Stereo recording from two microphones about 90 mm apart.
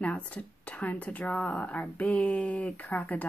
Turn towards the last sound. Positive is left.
turn(degrees=20)  # may be behind; listen again after turning